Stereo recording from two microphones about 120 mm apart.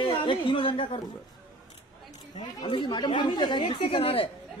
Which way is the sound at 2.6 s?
40° left (ahead or behind).